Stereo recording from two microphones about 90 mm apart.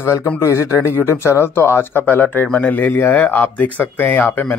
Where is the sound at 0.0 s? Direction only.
30° left (ahead or behind).